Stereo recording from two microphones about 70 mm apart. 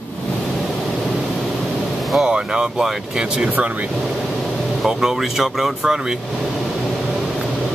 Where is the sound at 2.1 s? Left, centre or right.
Centre.